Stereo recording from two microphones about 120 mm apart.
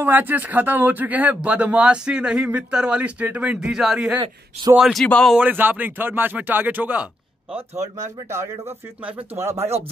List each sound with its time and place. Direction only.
0.0 s speech: 15° right (ahead or behind)
4.2 s speech: 40° right (ahead or behind)
4.7 s speech: centre (ahead or behind)
5.0 s speech: 10° left (ahead or behind)
5.3 s speech: 15° right (ahead or behind)
7.5 s speech: 70° right (ahead or behind)
9.0 s speech: 15° right (ahead or behind)